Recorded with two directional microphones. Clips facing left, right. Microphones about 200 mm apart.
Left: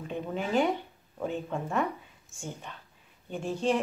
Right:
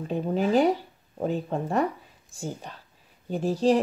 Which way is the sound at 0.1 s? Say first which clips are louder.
Right 6 dB; 35° right (ahead or behind).